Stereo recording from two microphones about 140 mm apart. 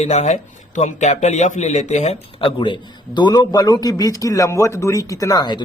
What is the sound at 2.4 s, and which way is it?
A man's voice, 40° left (ahead or behind).